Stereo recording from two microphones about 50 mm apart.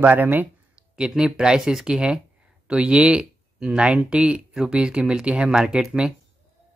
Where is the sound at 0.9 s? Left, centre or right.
Centre.